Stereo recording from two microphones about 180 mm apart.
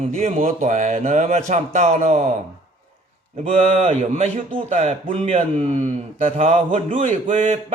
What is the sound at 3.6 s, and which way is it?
Speech, 35° right (ahead or behind).